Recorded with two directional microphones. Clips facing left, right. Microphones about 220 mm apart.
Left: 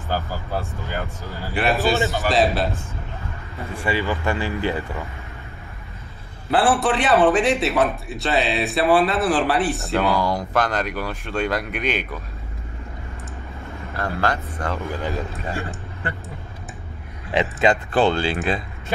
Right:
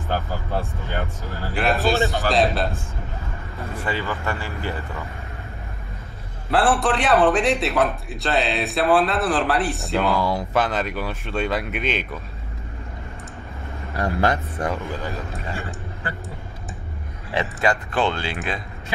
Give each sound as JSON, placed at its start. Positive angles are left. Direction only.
{"t": 0.5, "sound": "a man's voice", "side_deg": 0}
{"t": 3.8, "sound": "speech", "side_deg": 15}
{"t": 6.5, "sound": "a man's voice", "side_deg": 0}
{"t": 13.9, "sound": "speech", "side_deg": -20}
{"t": 17.3, "sound": "speech", "side_deg": 15}
{"t": 17.9, "sound": "speech", "side_deg": 35}